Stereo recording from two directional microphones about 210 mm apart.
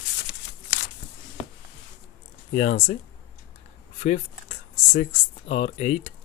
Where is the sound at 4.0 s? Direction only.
35° left (ahead or behind).